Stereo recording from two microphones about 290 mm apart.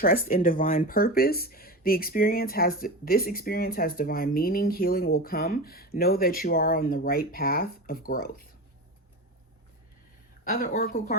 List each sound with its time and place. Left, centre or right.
0.0 s speech: left
10.5 s a woman's voice: left